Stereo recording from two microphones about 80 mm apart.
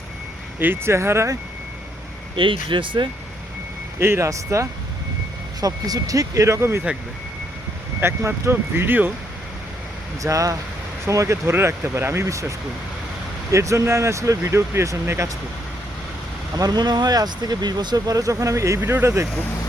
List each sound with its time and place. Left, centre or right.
0.6 s speech: right
2.3 s speech: right
4.0 s speech: right
5.5 s speech: right
8.0 s speech: right
10.2 s speech: right
16.6 s speech: right
18.8 s speech: right